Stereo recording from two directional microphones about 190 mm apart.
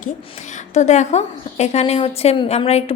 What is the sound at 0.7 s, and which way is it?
A woman's voice, 40° left (ahead or behind).